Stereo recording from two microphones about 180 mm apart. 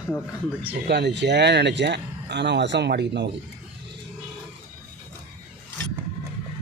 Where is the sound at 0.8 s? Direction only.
70° right (ahead or behind).